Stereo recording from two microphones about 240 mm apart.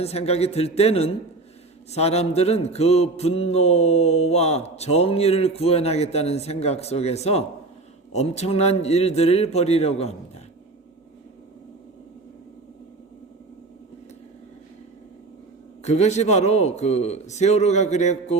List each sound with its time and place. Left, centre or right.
0.0 s mantra: left
15.8 s mantra: left